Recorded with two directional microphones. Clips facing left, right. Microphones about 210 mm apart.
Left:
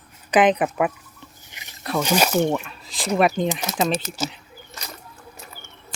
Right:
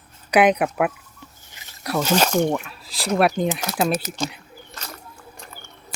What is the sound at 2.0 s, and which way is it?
Speech, 10° left (ahead or behind).